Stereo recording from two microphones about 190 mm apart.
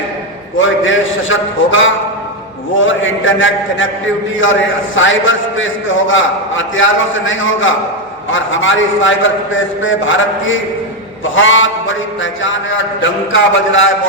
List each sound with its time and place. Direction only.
0.6 s a man's voice: 90° left
4.9 s a man's voice: 90° left